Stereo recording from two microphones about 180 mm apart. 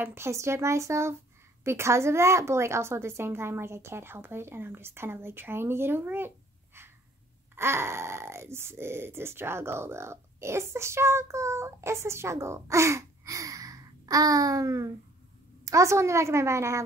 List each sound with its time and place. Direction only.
0.0 s speech: 15° right (ahead or behind)